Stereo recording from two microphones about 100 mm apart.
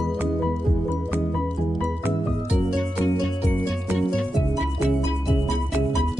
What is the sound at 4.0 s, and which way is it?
Music, 5° left (ahead or behind).